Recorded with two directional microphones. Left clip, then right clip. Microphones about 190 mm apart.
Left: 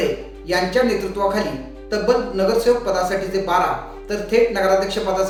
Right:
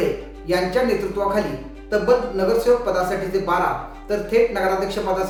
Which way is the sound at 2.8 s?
10° right (ahead or behind).